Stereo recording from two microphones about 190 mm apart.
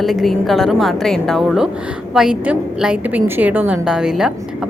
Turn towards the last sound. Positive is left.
turn(degrees=-5)  # may be behind; listen again after turning